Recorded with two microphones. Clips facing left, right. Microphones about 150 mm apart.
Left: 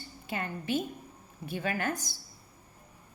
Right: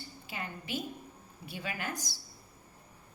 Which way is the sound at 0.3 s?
50° left (ahead or behind).